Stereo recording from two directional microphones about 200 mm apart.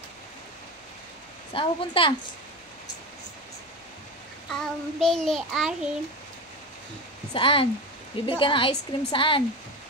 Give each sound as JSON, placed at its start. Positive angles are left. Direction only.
{"t": 1.5, "sound": "a woman's voice", "side_deg": 25}
{"t": 4.5, "sound": "child singing", "side_deg": 5}
{"t": 7.3, "sound": "a woman's voice", "side_deg": 25}